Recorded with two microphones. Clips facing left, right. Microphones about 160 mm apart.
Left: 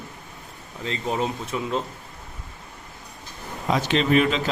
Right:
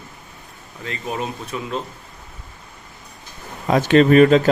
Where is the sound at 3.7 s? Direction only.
50° right (ahead or behind).